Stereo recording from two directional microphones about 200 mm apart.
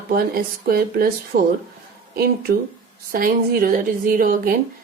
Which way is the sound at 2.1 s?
50° right (ahead or behind).